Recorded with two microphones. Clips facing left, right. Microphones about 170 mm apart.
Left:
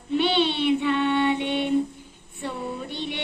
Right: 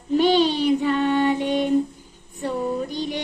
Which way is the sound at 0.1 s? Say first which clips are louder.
Right 5 dB; 40° right (ahead or behind).